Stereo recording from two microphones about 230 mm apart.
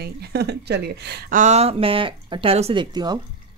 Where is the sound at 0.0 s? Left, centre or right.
Right.